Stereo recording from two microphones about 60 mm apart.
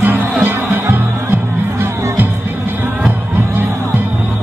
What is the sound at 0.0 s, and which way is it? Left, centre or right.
Music, right.